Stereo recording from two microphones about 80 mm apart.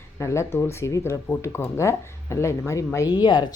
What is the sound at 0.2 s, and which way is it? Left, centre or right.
Speech, left.